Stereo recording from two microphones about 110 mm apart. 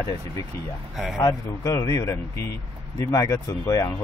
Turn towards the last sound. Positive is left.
turn(degrees=35)  # may be behind; listen again after turning